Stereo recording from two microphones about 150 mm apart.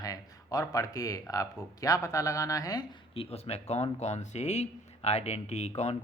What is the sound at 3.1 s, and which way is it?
Speech, 40° left (ahead or behind).